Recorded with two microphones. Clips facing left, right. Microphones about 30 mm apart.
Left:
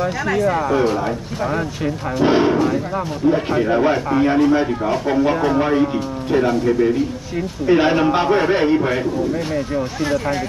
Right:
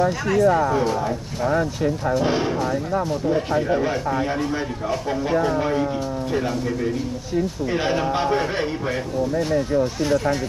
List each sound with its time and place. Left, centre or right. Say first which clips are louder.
0.5 s speech: left 2 dB; left